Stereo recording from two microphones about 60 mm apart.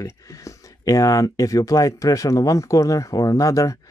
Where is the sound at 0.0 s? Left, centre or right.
Left.